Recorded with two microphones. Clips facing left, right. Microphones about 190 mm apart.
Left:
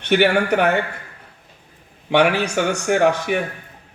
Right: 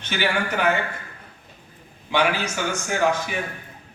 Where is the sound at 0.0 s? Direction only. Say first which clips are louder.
Left 9 dB; 65° left (ahead or behind).